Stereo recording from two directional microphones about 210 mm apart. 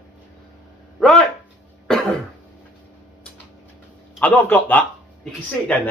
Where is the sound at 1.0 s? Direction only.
Centre (ahead or behind).